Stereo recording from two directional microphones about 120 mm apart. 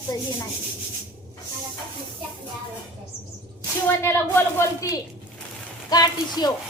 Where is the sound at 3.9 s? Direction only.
20° left (ahead or behind).